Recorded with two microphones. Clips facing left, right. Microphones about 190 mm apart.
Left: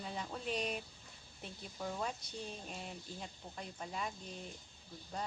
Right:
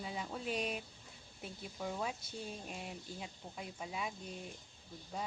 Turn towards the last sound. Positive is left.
turn(degrees=-5)  # may be behind; listen again after turning